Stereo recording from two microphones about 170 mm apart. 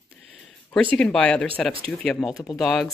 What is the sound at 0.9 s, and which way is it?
Speech, 5° left (ahead or behind).